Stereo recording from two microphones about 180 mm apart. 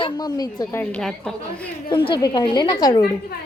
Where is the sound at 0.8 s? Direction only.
5° left (ahead or behind).